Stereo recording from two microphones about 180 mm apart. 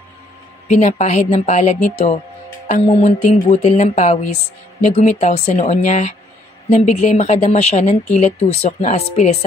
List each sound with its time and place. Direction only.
0.7 s music: 40° left (ahead or behind)